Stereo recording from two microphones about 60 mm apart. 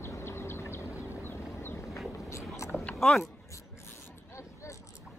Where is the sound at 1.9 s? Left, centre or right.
Centre.